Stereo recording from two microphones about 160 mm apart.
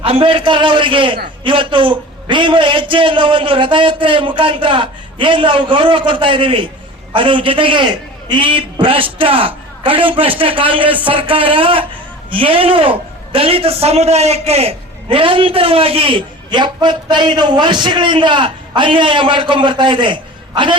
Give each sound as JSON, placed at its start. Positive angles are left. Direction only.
{"t": 0.0, "sound": "a woman's voice", "side_deg": -35}